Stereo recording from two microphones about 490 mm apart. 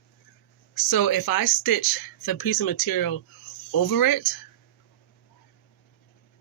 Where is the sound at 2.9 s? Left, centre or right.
Left.